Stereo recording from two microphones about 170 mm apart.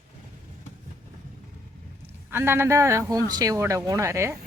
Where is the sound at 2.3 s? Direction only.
15° right (ahead or behind).